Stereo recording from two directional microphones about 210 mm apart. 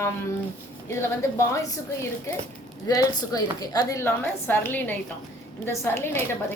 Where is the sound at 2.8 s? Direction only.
15° left (ahead or behind).